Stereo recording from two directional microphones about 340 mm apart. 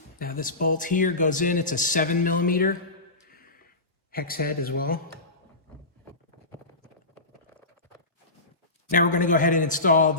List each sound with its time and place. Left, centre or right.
0.2 s speech: left
3.2 s a sound: left
4.1 s speech: left
8.9 s speech: left